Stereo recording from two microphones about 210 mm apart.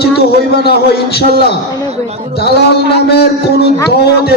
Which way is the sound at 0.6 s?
50° left (ahead or behind).